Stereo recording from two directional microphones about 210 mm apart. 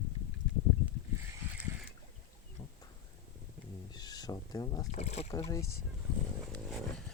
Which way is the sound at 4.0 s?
20° left (ahead or behind).